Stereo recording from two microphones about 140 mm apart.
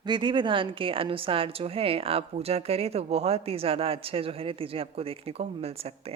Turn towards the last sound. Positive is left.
turn(degrees=-45)  # may be behind; listen again after turning